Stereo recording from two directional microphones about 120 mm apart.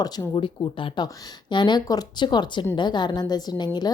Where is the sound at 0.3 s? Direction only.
45° left (ahead or behind).